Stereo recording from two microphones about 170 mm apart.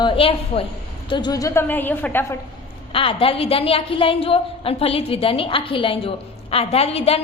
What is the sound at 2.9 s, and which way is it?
A woman's voice, 35° left (ahead or behind).